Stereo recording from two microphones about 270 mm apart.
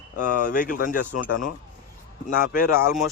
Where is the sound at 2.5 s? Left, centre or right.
Left.